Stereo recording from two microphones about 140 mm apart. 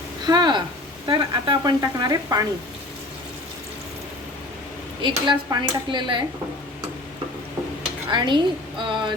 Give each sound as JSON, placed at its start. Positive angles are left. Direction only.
{"t": 0.3, "sound": "a woman's voice", "side_deg": -30}
{"t": 5.0, "sound": "speech", "side_deg": -30}
{"t": 8.1, "sound": "speech", "side_deg": -35}